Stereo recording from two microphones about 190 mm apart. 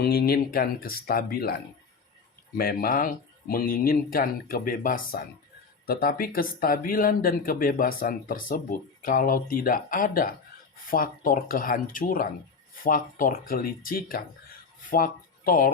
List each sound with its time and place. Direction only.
0.0 s speech: 55° left (ahead or behind)
2.6 s speech: 50° left (ahead or behind)